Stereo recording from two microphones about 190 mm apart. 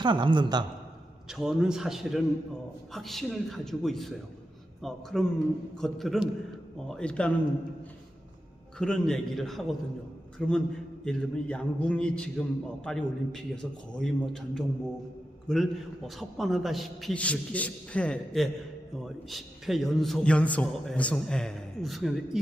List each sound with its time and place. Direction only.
0.0 s a man's voice: 25° right (ahead or behind)
1.3 s a man's voice: 5° right (ahead or behind)
8.8 s a man's voice: 5° left (ahead or behind)